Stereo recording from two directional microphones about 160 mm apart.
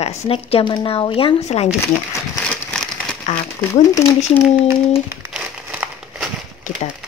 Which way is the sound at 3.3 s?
45° left (ahead or behind).